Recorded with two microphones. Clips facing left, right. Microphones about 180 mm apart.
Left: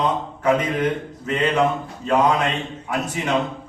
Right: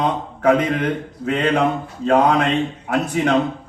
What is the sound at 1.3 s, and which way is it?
A man's voice, 60° right (ahead or behind).